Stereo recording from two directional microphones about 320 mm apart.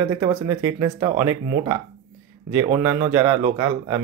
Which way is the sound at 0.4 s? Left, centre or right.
Centre.